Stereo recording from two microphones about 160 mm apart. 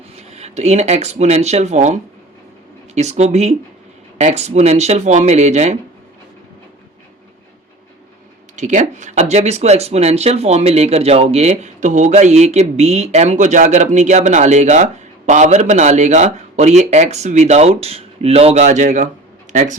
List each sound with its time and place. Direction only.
0.2 s speech: 40° right (ahead or behind)
8.5 s speech: 50° right (ahead or behind)